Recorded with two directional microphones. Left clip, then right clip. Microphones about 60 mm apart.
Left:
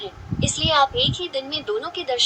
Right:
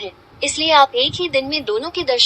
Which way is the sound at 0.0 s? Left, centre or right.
Right.